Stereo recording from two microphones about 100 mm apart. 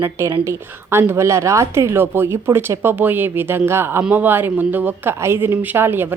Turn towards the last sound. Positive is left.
turn(degrees=-20)  # may be behind; listen again after turning